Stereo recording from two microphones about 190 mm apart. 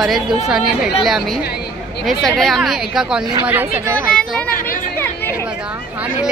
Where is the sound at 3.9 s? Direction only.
5° left (ahead or behind).